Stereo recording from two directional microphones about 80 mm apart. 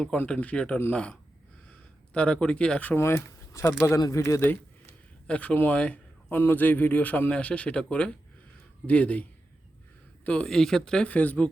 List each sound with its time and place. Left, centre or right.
0.3 s speech: centre
2.1 s speech: centre
2.9 s speech: left
5.3 s a man's voice: centre
10.2 s speech: centre